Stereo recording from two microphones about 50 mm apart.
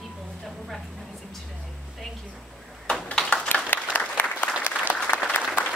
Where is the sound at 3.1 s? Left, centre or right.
Centre.